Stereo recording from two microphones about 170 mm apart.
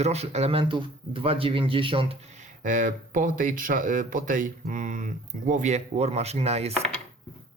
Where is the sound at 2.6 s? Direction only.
50° right (ahead or behind).